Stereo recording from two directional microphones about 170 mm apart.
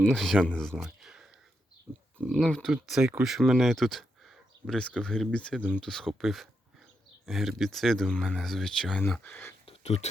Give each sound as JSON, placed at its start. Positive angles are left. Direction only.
{"t": 0.0, "sound": "speech", "side_deg": 0}
{"t": 1.9, "sound": "speech", "side_deg": -15}
{"t": 2.2, "sound": "speech", "side_deg": 5}
{"t": 9.6, "sound": "a sound", "side_deg": 40}